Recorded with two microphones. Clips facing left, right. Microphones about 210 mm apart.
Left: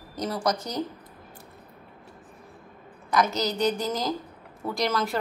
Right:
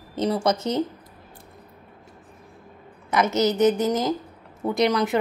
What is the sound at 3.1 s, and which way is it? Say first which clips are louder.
Speech: right 4 dB; 20° right (ahead or behind).